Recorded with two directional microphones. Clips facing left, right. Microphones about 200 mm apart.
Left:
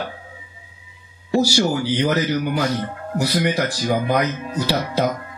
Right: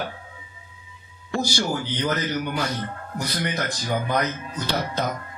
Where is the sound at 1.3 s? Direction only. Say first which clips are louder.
Left 7 dB; 10° left (ahead or behind).